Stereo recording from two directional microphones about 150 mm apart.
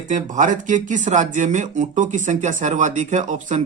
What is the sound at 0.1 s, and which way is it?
Speech, 60° right (ahead or behind).